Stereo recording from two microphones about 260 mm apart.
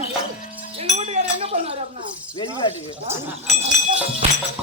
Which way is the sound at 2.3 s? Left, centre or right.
Centre.